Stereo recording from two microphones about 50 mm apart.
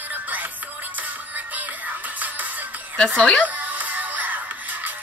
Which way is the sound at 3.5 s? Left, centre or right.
Right.